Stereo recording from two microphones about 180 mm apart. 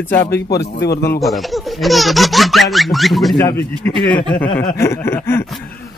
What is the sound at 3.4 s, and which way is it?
Speech, 20° left (ahead or behind).